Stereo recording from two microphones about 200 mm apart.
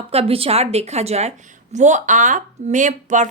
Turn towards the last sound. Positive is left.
turn(degrees=-40)  # may be behind; listen again after turning